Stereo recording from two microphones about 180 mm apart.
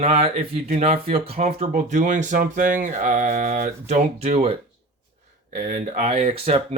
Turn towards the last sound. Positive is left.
turn(degrees=-35)  # may be behind; listen again after turning